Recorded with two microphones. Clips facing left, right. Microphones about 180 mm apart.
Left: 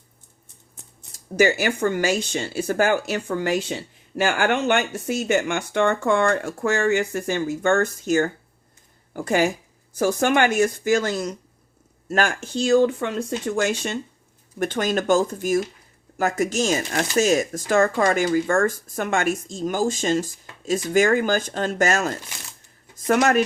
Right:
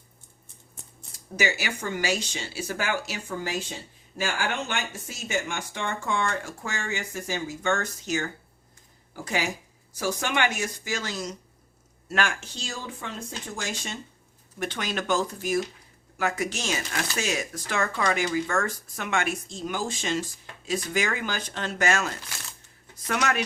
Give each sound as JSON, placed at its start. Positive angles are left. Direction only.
{"t": 1.4, "sound": "speech", "side_deg": 50}
{"t": 12.0, "sound": "speech", "side_deg": 40}
{"t": 14.6, "sound": "speech", "side_deg": 45}
{"t": 22.3, "sound": "speech", "side_deg": 20}
{"t": 23.0, "sound": "speech", "side_deg": 45}